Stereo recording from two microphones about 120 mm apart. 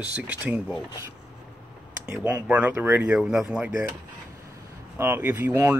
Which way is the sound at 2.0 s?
10° right (ahead or behind).